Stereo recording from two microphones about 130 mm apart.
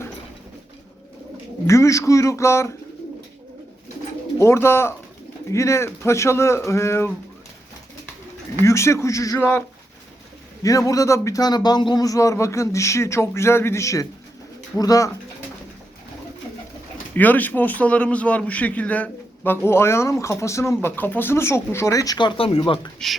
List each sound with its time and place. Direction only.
1.6 s a man's voice: 25° left (ahead or behind)
4.4 s a man's voice: 20° left (ahead or behind)
8.6 s a man's voice: 20° left (ahead or behind)
10.6 s a man's voice: 25° left (ahead or behind)
17.2 s a man's voice: 15° left (ahead or behind); by 22.9 s 35° left (ahead or behind)